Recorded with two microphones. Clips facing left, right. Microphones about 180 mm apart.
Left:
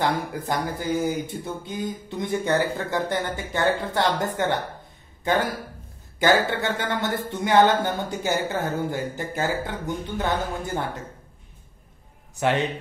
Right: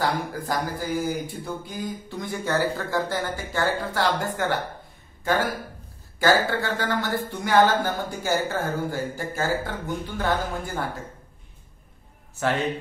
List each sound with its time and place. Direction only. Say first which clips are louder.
0.0 s speech: left 1 dB; 20° left (ahead or behind)
6.1 s speech: left 1 dB; 20° left (ahead or behind)
12.4 s a man's voice: left 2 dB; 15° left (ahead or behind)